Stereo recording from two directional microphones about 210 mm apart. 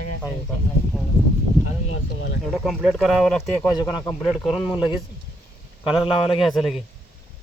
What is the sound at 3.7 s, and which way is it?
Speech, 20° left (ahead or behind).